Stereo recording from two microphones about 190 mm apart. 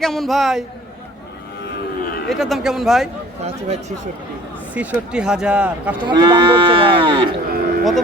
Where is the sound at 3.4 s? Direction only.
35° right (ahead or behind).